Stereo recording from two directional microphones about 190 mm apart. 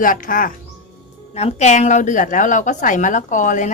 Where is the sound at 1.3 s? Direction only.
35° left (ahead or behind).